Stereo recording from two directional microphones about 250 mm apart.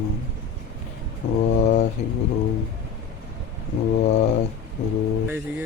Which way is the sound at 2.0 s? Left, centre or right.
Left.